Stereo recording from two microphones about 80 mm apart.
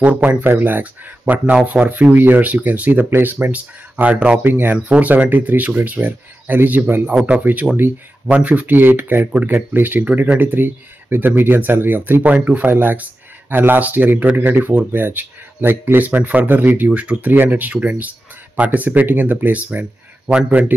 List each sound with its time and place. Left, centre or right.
0.0 s speech: centre